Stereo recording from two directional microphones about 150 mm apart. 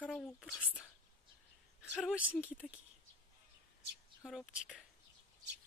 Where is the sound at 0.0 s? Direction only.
5° left (ahead or behind).